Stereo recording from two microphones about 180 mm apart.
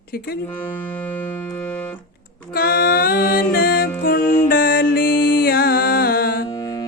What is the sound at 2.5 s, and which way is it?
Music, 55° left (ahead or behind).